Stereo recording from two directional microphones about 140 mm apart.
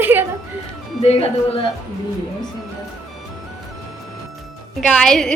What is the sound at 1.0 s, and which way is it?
Speech, 45° left (ahead or behind).